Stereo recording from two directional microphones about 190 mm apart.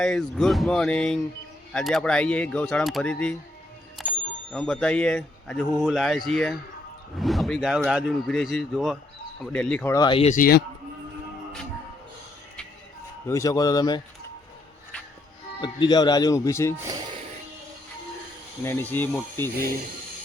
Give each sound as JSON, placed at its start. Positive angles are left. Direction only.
{"t": 0.0, "sound": "a man's voice", "side_deg": 0}
{"t": 4.0, "sound": "bicycle bell", "side_deg": 0}
{"t": 4.5, "sound": "a man's voice", "side_deg": 5}
{"t": 9.9, "sound": "speech", "side_deg": 25}
{"t": 10.2, "sound": "a man's voice", "side_deg": 45}
{"t": 13.2, "sound": "speech", "side_deg": 15}
{"t": 15.6, "sound": "speech", "side_deg": 20}
{"t": 18.6, "sound": "speech", "side_deg": 10}